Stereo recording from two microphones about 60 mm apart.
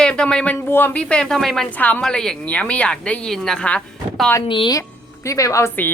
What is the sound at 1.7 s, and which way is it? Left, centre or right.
Speech, left.